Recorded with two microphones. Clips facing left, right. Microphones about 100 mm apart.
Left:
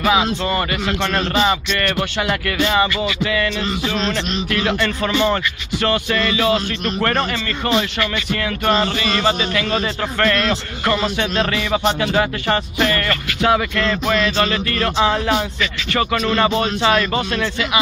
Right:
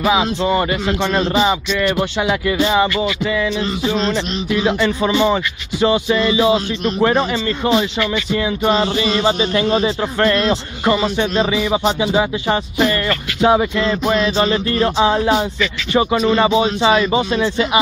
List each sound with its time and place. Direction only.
0.0 s speech: 5° right (ahead or behind)
1.3 s music: 5° right (ahead or behind)
4.5 s speech: 5° right (ahead or behind)
9.2 s a man's voice: 25° right (ahead or behind)
11.0 s music: 5° right (ahead or behind)
11.7 s speech: 10° right (ahead or behind)
14.4 s a man's voice: 20° right (ahead or behind)
16.2 s music: 5° right (ahead or behind)